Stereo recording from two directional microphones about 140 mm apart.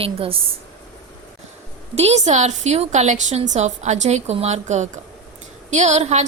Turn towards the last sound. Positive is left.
turn(degrees=-55)  # may be behind; listen again after turning